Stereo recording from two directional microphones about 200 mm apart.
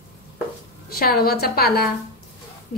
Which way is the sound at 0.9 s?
50° left (ahead or behind).